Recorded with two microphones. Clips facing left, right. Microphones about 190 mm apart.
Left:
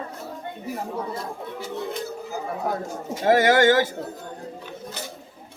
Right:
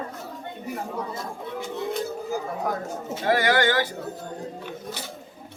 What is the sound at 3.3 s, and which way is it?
Speech, 45° left (ahead or behind).